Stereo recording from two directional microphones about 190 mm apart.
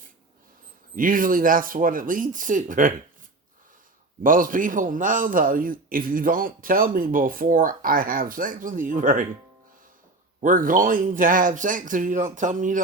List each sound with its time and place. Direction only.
0.9 s a man's voice: 45° right (ahead or behind)
4.2 s a man's voice: 45° right (ahead or behind)
10.4 s a man's voice: 45° right (ahead or behind)